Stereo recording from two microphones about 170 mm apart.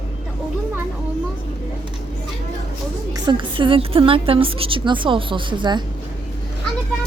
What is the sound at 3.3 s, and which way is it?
A woman's voice, 30° right (ahead or behind).